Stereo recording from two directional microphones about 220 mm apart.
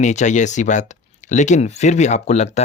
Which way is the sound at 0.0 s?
35° left (ahead or behind).